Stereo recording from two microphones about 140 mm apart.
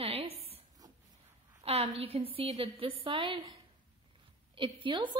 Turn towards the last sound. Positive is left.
turn(degrees=-35)  # may be behind; listen again after turning